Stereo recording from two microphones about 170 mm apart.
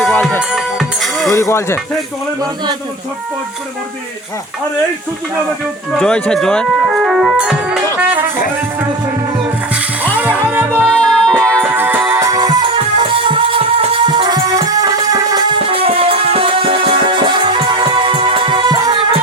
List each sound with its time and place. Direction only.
0.0 s music: 5° left (ahead or behind)
1.3 s speech: 15° left (ahead or behind)
5.9 s speech: 5° left (ahead or behind)
10.8 s music: 5° left (ahead or behind)
11.6 s music: 10° right (ahead or behind)